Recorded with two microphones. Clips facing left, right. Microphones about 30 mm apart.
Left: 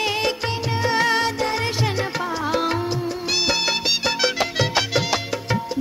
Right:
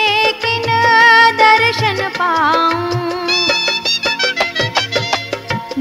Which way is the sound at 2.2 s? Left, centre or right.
Right.